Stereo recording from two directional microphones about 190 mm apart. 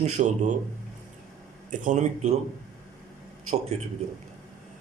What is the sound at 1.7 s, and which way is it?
Speech, 40° right (ahead or behind).